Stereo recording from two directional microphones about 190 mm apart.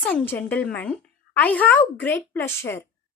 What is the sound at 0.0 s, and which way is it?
Speech, 5° left (ahead or behind).